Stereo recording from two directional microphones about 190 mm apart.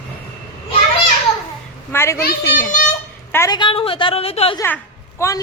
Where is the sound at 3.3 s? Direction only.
15° left (ahead or behind); by 4.5 s 30° left (ahead or behind).